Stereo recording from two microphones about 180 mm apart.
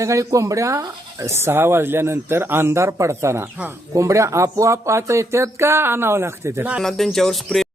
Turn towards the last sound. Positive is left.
turn(degrees=0)  # may be behind; listen again after turning